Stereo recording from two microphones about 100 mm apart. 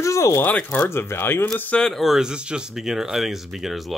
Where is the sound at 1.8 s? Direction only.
Centre (ahead or behind).